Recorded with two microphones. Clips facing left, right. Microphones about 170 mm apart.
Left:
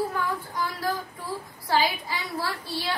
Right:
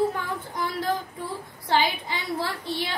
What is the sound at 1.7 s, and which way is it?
A woman's voice, 20° right (ahead or behind).